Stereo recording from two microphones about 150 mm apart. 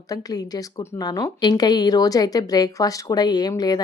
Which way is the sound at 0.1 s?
25° left (ahead or behind).